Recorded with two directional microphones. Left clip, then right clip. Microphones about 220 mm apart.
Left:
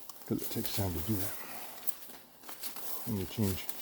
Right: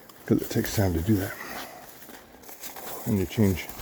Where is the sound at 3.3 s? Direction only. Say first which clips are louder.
Right 10 dB; 40° right (ahead or behind).